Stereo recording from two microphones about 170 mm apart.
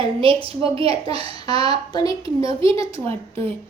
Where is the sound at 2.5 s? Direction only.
30° right (ahead or behind).